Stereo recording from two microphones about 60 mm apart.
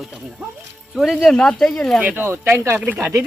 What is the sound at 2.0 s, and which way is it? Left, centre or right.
Speech, right.